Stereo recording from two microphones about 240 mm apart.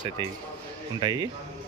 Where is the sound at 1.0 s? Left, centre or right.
Centre.